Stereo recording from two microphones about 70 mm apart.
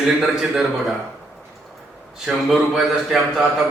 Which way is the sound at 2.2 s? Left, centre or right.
Centre.